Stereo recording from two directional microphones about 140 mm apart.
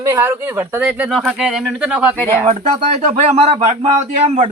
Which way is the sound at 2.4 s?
50° right (ahead or behind).